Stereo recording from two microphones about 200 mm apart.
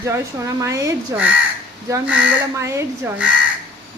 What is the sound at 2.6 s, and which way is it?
Speech, 15° right (ahead or behind).